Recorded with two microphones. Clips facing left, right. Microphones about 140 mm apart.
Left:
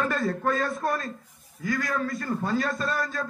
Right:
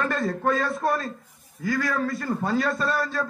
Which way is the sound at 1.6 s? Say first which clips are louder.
Right 3 dB; 35° right (ahead or behind).